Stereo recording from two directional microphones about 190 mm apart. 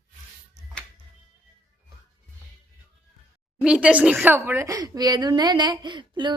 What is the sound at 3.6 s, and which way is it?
A woman's voice, 5° right (ahead or behind).